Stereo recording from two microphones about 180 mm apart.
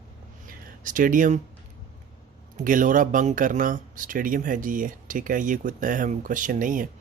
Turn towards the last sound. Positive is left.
turn(degrees=-50)  # may be behind; listen again after turning